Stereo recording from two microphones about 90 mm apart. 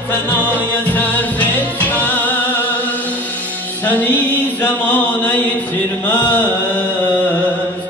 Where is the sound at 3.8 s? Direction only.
20° left (ahead or behind).